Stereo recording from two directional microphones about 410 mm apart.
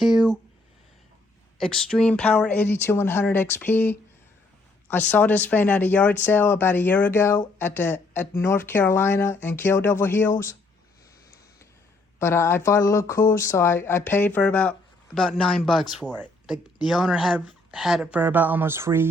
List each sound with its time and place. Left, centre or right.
1.5 s speech: centre
12.2 s speech: centre